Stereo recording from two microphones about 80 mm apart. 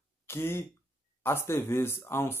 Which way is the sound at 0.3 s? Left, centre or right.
Left.